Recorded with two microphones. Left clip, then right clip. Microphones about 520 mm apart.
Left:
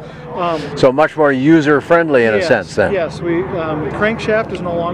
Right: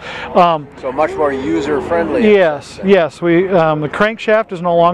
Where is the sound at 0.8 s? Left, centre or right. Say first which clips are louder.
Left 4 dB; left.